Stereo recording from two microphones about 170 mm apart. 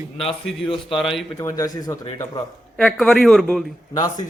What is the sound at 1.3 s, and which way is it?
A man's voice, 20° left (ahead or behind).